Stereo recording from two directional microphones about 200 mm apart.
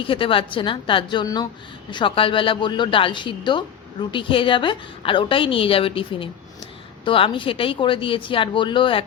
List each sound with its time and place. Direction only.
0.0 s a woman's voice: 25° left (ahead or behind)